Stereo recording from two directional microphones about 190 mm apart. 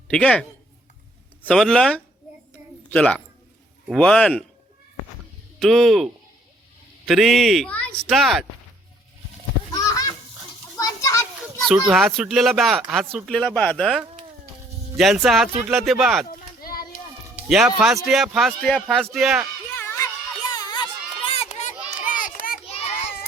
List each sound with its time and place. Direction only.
0.1 s speech: 5° left (ahead or behind)
1.5 s speech: 5° left (ahead or behind)
5.5 s speech: centre (ahead or behind)
9.7 s goose: 20° left (ahead or behind)
10.8 s children playing: 20° left (ahead or behind)
11.7 s speech: 5° right (ahead or behind)
16.6 s a sound: 50° left (ahead or behind)
17.5 s speech: 5° right (ahead or behind)
19.7 s music: 10° left (ahead or behind)
20.5 s crowd: 20° left (ahead or behind)
21.2 s a sound: 30° left (ahead or behind); by 22.5 s 45° left (ahead or behind)
22.6 s child singing: 30° left (ahead or behind)